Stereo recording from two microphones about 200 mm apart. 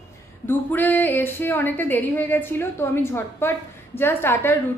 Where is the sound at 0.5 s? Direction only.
10° left (ahead or behind).